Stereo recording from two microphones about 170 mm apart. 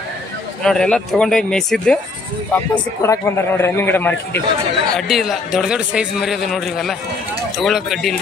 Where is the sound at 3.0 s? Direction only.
15° left (ahead or behind).